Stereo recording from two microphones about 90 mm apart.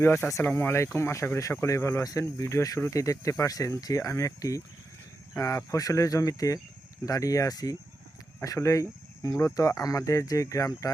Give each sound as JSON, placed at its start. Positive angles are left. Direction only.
{"t": 0.0, "sound": "speech", "side_deg": 30}